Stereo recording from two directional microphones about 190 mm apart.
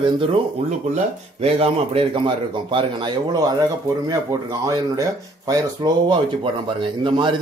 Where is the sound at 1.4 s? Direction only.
30° right (ahead or behind).